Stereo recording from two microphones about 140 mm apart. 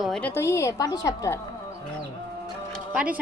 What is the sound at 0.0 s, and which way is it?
Speech, centre (ahead or behind).